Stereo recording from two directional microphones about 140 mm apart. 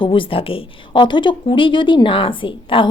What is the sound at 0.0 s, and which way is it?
A woman's voice, 35° left (ahead or behind).